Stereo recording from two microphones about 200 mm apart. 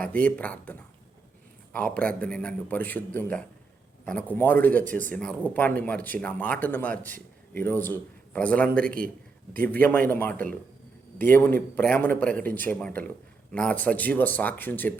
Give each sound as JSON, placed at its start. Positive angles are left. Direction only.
{"t": 0.1, "sound": "speech", "side_deg": 10}
{"t": 4.9, "sound": "speech", "side_deg": -40}
{"t": 5.1, "sound": "speech", "side_deg": 5}